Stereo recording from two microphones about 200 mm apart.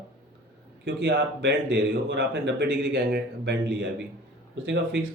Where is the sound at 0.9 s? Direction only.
55° right (ahead or behind).